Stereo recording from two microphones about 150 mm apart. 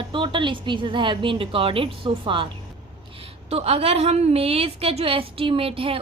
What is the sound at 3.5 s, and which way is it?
A woman's voice, 45° right (ahead or behind).